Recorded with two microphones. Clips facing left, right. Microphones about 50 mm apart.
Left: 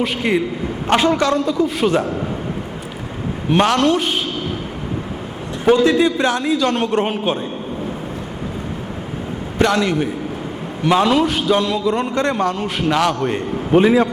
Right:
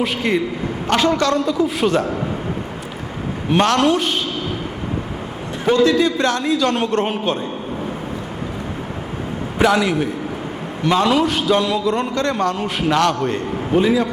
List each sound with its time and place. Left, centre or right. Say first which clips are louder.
0.0 s a man's voice: left 1 dB; centre
0.9 s a man's voice: left 1 dB; centre
3.5 s a man's voice: even; centre
5.8 s a man's voice: even; left
6.1 s a man's voice: left 1 dB; centre
9.6 s a man's voice: even; centre
13.2 s a man's voice: left 1 dB; centre